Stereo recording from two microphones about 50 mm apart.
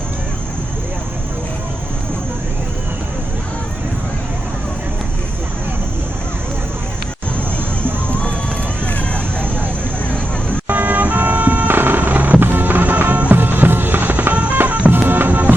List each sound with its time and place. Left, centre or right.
10.7 s music: right